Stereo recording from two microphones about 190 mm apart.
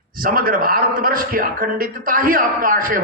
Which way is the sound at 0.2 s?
50° right (ahead or behind).